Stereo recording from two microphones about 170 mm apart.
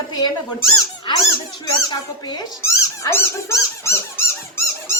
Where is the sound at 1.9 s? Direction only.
20° left (ahead or behind).